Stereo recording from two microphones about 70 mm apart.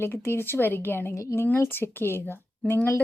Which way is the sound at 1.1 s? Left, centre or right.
Left.